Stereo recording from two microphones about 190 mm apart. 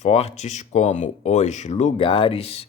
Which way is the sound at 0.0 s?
35° left (ahead or behind).